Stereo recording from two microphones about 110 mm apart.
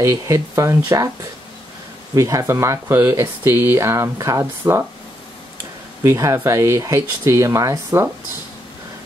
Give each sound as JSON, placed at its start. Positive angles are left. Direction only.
{"t": 0.0, "sound": "speech", "side_deg": -30}
{"t": 2.1, "sound": "speech", "side_deg": -30}
{"t": 6.0, "sound": "speech", "side_deg": -25}